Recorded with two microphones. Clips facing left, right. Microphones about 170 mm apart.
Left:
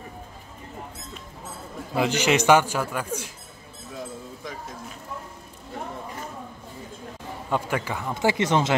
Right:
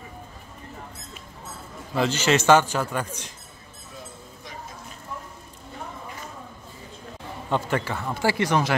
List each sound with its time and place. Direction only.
2.0 s a man's voice: 15° left (ahead or behind)
7.4 s a man's voice: 10° left (ahead or behind)